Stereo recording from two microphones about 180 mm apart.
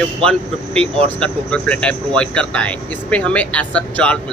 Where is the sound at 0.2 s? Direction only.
5° left (ahead or behind).